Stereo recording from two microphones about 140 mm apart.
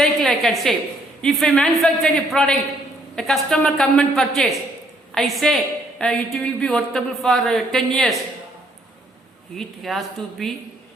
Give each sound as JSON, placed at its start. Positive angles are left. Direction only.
{"t": 0.0, "sound": "a sound", "side_deg": 5}
{"t": 1.2, "sound": "speech", "side_deg": 5}
{"t": 9.6, "sound": "speech", "side_deg": 0}